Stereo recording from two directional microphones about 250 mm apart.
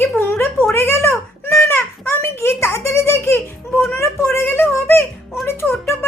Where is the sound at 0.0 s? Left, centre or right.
Centre.